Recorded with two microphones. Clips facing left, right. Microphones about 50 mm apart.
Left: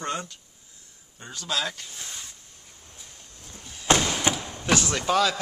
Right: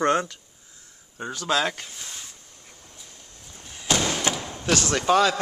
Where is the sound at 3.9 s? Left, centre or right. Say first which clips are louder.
Left 2 dB; left.